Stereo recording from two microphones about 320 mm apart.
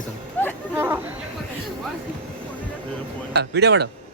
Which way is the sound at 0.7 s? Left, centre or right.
Centre.